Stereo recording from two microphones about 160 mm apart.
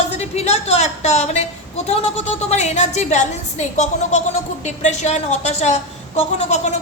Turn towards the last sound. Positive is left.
turn(degrees=45)  # may be behind; listen again after turning